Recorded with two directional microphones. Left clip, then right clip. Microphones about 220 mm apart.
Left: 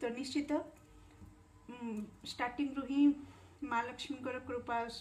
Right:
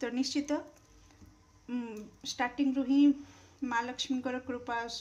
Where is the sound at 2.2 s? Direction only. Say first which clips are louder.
Right 6 dB; 45° right (ahead or behind).